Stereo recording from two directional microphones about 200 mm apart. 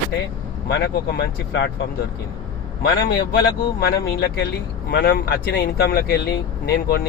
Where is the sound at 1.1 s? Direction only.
55° left (ahead or behind).